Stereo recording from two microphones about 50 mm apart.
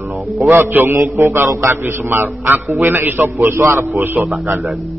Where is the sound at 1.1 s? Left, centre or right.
Right.